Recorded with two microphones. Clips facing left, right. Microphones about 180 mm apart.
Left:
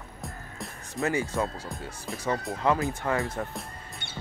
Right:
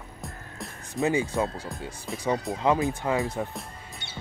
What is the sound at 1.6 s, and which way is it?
Speech, centre (ahead or behind).